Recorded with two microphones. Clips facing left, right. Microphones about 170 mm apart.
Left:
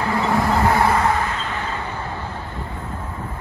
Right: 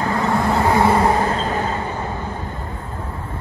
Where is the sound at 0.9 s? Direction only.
30° right (ahead or behind).